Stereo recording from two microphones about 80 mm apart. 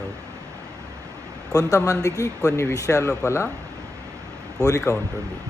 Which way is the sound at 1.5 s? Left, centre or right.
Left.